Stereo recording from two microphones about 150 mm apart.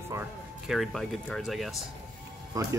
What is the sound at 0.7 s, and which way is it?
Speech, centre (ahead or behind).